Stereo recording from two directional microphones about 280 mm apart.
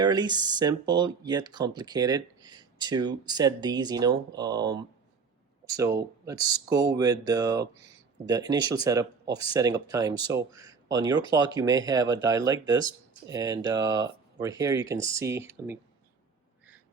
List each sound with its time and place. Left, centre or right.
0.0 s speech: centre